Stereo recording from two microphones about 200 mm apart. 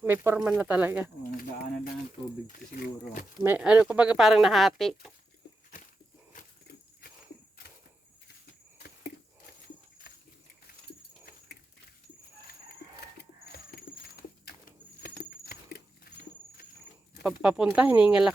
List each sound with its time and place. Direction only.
0.0 s speech: 10° right (ahead or behind)
1.2 s speech: 45° left (ahead or behind)
3.4 s speech: 5° right (ahead or behind)
6.3 s a sound: 45° left (ahead or behind)
13.1 s a sound: 50° left (ahead or behind)
17.2 s speech: 5° right (ahead or behind)